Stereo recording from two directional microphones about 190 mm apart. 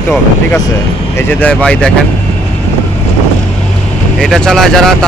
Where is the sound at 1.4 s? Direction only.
5° left (ahead or behind).